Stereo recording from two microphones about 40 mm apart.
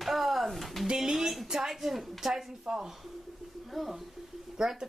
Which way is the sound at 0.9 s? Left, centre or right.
Centre.